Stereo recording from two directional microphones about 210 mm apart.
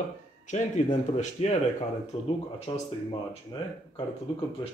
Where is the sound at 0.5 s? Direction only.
35° left (ahead or behind).